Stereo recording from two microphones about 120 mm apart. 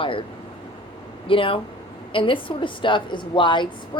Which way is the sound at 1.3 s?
45° left (ahead or behind).